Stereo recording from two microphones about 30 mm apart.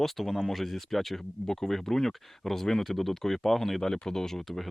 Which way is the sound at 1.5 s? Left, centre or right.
Centre.